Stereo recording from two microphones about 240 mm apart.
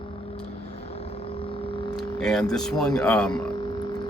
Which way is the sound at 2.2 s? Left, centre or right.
Centre.